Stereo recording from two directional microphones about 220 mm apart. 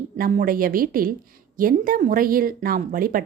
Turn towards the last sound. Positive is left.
turn(degrees=-40)  # may be behind; listen again after turning